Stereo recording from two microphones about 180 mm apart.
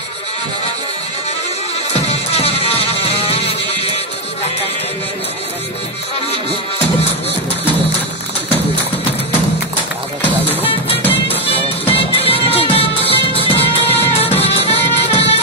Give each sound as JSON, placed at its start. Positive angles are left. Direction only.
{"t": 2.0, "sound": "music", "side_deg": 35}
{"t": 10.6, "sound": "music", "side_deg": 30}